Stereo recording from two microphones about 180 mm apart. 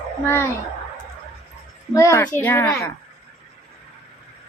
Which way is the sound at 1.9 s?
15° left (ahead or behind).